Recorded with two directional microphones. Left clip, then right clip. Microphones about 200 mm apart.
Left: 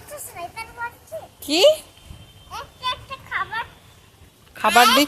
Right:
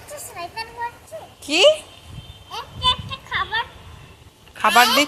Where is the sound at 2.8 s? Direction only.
15° left (ahead or behind).